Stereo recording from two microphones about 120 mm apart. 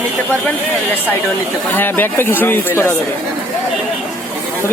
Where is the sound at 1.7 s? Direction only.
15° left (ahead or behind).